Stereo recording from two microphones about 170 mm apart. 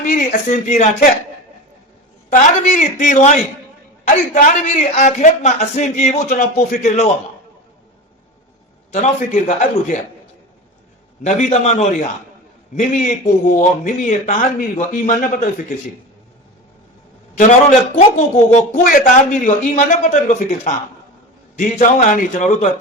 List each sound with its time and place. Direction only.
0.0 s a man's voice: 50° left (ahead or behind)
2.3 s a man's voice: 45° left (ahead or behind)
8.9 s a man's voice: 45° left (ahead or behind)
11.2 s a man's voice: 45° left (ahead or behind)
17.3 s a man's voice: 45° left (ahead or behind)